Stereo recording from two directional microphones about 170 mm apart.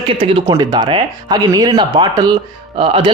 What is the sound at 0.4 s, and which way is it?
A man's voice, 20° right (ahead or behind).